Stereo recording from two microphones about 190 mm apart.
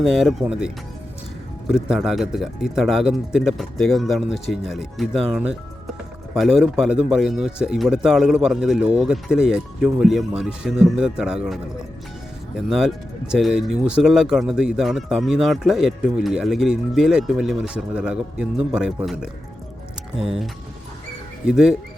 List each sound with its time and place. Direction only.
0.0 s speech: centre (ahead or behind)